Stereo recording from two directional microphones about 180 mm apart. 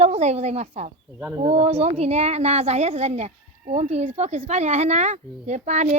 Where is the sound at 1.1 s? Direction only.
10° right (ahead or behind).